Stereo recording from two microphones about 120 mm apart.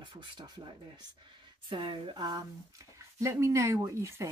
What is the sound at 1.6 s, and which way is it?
Speech, 40° right (ahead or behind).